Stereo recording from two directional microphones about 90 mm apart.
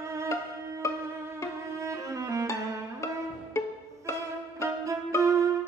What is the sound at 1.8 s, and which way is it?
Music, 35° right (ahead or behind).